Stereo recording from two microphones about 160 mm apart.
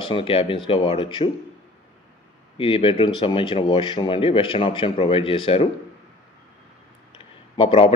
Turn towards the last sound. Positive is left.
turn(degrees=35)  # may be behind; listen again after turning